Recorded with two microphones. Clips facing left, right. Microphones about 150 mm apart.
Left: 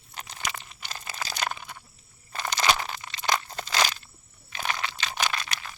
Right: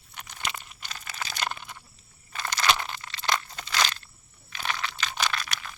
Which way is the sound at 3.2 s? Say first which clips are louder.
Left 1 dB; 25° left (ahead or behind).